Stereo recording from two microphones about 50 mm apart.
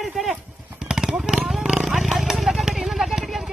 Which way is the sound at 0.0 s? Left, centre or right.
Centre.